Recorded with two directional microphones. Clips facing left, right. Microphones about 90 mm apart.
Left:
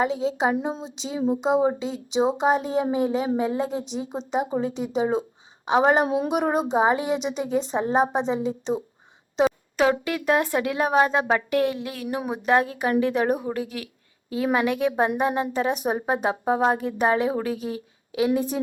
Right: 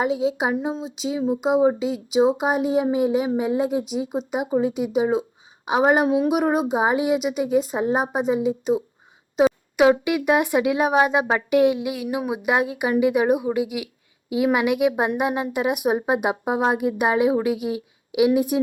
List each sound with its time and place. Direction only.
0.0 s speech: 10° right (ahead or behind)